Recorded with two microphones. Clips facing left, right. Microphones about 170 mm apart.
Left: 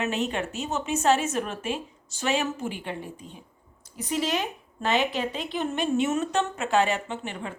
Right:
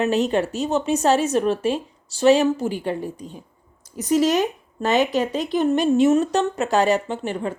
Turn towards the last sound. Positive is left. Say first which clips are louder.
# right 8 dB
turn(degrees=-40)  # may be behind; listen again after turning